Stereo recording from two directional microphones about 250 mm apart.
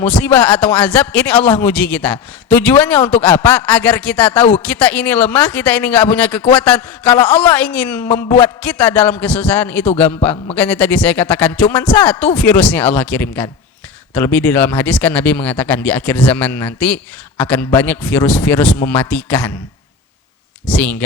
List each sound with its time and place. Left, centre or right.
0.0 s a man's voice: centre
8.0 s a sound: left
8.6 s a man's voice: centre
20.7 s a man's voice: centre